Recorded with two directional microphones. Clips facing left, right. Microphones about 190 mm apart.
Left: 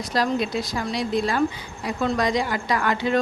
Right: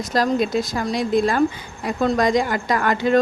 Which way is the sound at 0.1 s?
45° right (ahead or behind).